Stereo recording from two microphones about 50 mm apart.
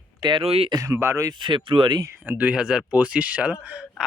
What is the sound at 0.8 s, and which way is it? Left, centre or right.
Speech, right.